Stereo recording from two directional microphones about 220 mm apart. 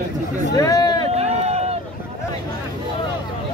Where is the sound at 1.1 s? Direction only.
30° right (ahead or behind).